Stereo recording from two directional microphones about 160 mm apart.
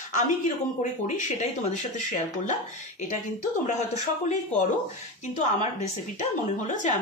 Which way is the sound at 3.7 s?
45° left (ahead or behind).